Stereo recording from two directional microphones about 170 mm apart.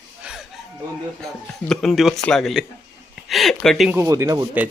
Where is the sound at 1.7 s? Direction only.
Centre (ahead or behind).